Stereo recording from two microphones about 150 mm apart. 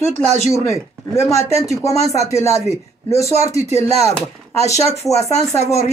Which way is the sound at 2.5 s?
45° left (ahead or behind).